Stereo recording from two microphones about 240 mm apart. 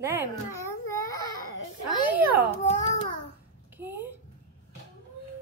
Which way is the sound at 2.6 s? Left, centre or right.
Left.